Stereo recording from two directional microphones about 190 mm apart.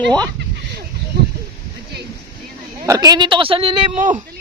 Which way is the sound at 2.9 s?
20° right (ahead or behind).